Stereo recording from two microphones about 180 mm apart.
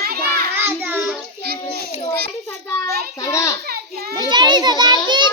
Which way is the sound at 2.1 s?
15° left (ahead or behind).